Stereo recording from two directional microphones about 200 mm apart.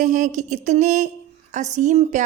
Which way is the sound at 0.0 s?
40° right (ahead or behind).